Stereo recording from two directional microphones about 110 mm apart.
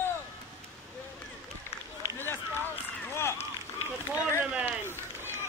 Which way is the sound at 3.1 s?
25° left (ahead or behind).